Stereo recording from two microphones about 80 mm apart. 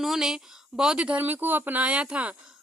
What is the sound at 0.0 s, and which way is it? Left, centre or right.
Speech, centre.